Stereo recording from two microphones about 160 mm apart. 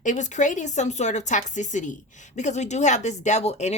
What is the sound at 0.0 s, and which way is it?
Speech, 50° left (ahead or behind).